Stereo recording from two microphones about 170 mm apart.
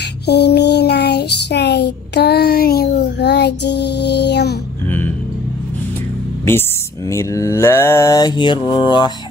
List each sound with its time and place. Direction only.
0.3 s child singing: 75° left (ahead or behind)
7.1 s mantra: 15° left (ahead or behind)